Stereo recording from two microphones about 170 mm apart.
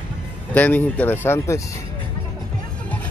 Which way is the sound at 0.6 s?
10° left (ahead or behind).